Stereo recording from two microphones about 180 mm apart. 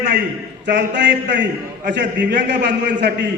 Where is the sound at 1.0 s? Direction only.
75° right (ahead or behind).